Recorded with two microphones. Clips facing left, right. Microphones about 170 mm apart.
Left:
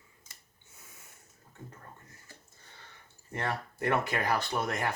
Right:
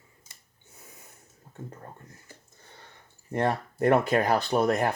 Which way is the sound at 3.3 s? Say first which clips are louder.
Right 8 dB; 40° right (ahead or behind).